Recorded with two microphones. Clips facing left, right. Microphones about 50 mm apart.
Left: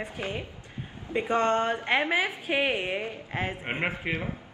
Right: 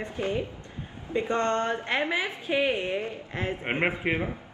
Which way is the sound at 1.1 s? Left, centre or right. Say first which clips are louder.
Left 1 dB; centre.